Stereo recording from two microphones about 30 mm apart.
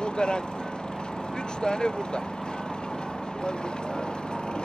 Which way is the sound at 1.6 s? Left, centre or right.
Left.